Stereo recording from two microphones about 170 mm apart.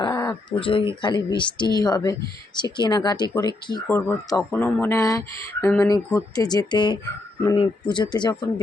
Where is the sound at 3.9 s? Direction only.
15° left (ahead or behind).